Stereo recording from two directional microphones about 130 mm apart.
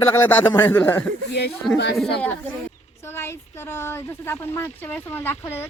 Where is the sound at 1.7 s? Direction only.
Centre (ahead or behind).